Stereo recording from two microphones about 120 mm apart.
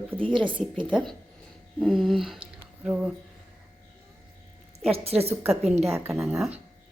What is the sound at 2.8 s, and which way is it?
Speech, 10° right (ahead or behind).